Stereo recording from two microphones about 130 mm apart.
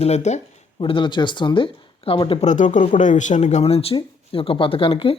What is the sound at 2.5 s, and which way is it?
Speech, 70° left (ahead or behind).